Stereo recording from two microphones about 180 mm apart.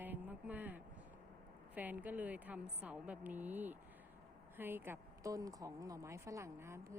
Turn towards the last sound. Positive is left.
turn(degrees=-15)  # may be behind; listen again after turning